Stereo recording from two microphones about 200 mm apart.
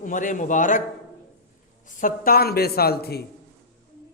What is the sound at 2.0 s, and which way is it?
A man's voice, 45° left (ahead or behind).